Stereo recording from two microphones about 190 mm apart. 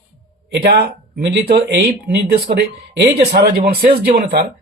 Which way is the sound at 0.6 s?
55° right (ahead or behind).